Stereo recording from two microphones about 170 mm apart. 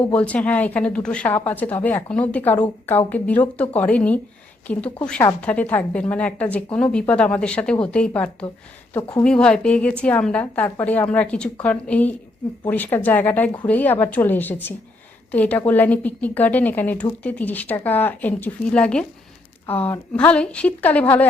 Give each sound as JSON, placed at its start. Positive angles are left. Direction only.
{"t": 0.1, "sound": "a woman's voice", "side_deg": 5}
{"t": 8.9, "sound": "a woman's voice", "side_deg": 15}
{"t": 9.2, "sound": "a woman's voice", "side_deg": 5}